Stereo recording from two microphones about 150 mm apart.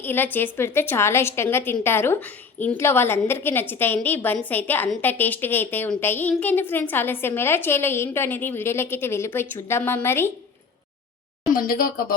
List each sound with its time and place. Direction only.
0.0 s a woman's voice: 15° left (ahead or behind)
11.5 s speech: 75° left (ahead or behind)